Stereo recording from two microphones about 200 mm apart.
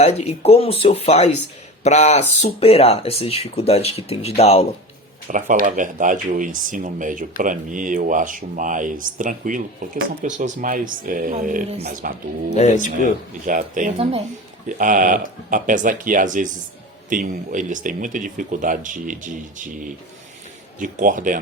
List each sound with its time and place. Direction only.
0.0 s speech: 30° left (ahead or behind)
5.3 s speech: 40° right (ahead or behind)
12.5 s speech: 35° left (ahead or behind)
13.4 s speech: 40° right (ahead or behind)